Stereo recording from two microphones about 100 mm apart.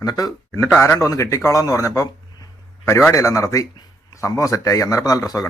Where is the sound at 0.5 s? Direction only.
30° left (ahead or behind).